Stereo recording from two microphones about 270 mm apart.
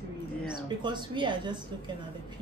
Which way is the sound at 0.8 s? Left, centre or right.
Centre.